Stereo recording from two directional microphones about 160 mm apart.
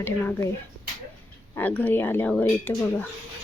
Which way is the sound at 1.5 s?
10° left (ahead or behind).